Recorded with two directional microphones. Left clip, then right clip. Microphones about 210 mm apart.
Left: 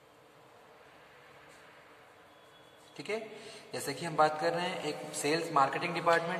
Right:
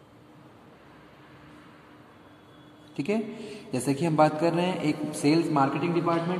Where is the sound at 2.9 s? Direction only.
30° right (ahead or behind).